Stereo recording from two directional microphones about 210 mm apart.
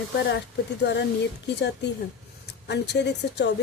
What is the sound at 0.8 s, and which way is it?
Speech, 55° left (ahead or behind).